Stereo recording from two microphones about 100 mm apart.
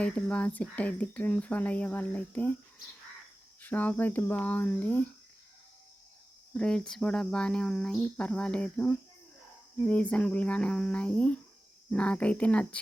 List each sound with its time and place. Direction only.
0.0 s speech: 15° left (ahead or behind)
3.6 s speech: 15° left (ahead or behind)
6.5 s speech: 10° left (ahead or behind)